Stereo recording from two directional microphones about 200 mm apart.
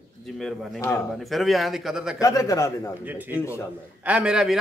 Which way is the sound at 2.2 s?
15° left (ahead or behind).